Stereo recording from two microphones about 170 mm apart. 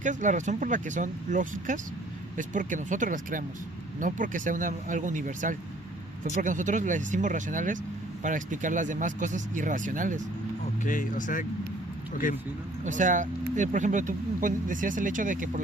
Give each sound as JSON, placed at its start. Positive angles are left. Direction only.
{"t": 0.0, "sound": "speech", "side_deg": -45}
{"t": 10.8, "sound": "speech", "side_deg": 50}
{"t": 12.8, "sound": "speech", "side_deg": -45}